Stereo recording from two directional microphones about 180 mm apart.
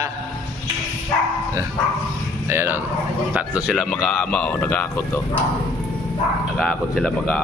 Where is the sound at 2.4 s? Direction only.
10° right (ahead or behind); by 5.4 s 10° left (ahead or behind).